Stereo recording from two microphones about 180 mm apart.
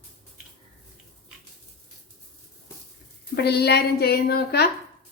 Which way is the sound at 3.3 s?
65° left (ahead or behind).